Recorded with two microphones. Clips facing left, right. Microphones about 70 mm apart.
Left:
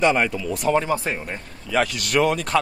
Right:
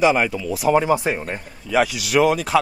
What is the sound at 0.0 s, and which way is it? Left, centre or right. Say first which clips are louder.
Speech: right 2 dB; centre.